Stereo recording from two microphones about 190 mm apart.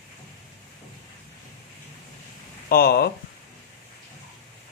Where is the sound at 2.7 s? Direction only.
55° left (ahead or behind).